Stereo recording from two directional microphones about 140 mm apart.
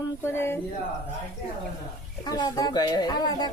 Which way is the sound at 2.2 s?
30° left (ahead or behind).